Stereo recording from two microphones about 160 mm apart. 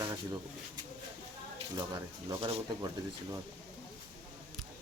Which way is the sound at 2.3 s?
30° right (ahead or behind).